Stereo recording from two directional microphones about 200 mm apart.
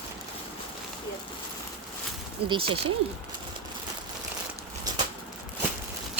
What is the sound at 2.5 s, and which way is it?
Speech, 25° right (ahead or behind).